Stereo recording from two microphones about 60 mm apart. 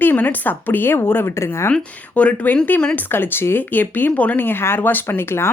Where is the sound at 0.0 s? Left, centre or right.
Left.